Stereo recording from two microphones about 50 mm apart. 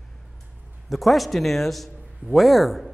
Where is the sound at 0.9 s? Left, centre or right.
Centre.